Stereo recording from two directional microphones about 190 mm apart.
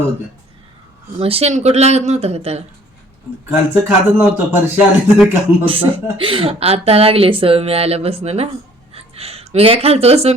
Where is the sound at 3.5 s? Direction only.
10° right (ahead or behind).